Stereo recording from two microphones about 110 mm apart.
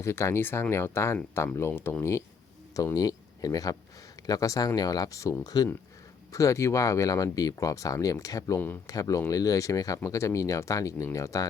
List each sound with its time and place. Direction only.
0.0 s speech: 25° left (ahead or behind)
8.5 s speech: 20° left (ahead or behind)
8.9 s speech: 30° left (ahead or behind)